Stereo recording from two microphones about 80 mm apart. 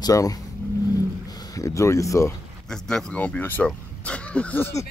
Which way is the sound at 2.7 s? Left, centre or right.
Centre.